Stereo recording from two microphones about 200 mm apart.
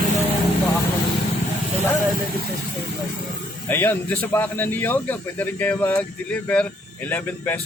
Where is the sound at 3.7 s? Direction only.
10° left (ahead or behind).